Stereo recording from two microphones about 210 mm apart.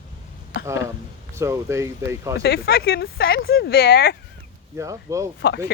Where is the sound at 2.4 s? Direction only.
50° left (ahead or behind).